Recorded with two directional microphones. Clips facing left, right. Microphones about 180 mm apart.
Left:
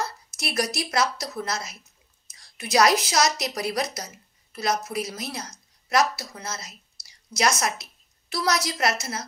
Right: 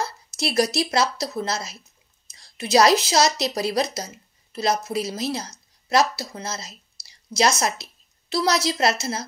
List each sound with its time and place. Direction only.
0.4 s a woman's voice: 25° right (ahead or behind)